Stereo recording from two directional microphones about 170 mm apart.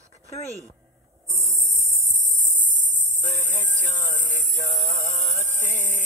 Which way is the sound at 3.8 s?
45° left (ahead or behind).